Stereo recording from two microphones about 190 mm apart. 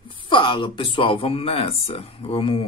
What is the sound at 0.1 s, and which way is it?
Speech, 25° left (ahead or behind).